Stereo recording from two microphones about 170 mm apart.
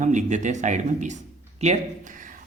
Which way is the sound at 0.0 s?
45° right (ahead or behind).